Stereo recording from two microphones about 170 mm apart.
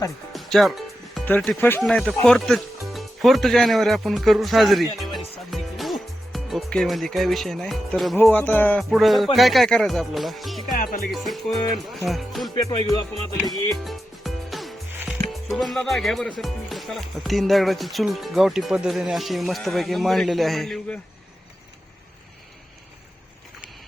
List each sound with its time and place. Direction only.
0.3 s music: centre (ahead or behind)
1.4 s speech: 10° left (ahead or behind)
10.7 s music: 55° left (ahead or behind)
11.1 s speech: centre (ahead or behind)
13.4 s music: centre (ahead or behind)
15.2 s speech: centre (ahead or behind)